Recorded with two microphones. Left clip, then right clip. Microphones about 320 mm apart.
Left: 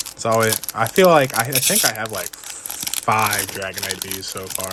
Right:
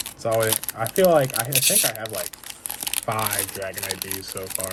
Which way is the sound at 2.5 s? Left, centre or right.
Centre.